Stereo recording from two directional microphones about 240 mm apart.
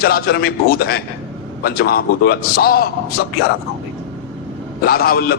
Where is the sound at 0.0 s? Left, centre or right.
Left.